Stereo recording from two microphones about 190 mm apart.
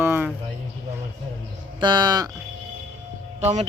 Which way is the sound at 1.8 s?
20° right (ahead or behind).